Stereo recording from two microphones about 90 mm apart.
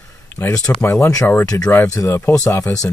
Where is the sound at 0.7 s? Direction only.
25° left (ahead or behind).